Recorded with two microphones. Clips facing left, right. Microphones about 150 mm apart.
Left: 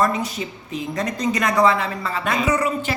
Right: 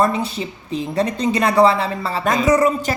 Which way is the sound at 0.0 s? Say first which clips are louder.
Right 3 dB; 30° right (ahead or behind).